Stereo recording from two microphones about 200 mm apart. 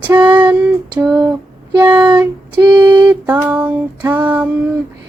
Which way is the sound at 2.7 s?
20° right (ahead or behind).